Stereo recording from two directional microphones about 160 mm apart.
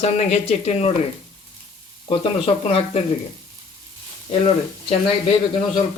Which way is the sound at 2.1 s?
35° left (ahead or behind).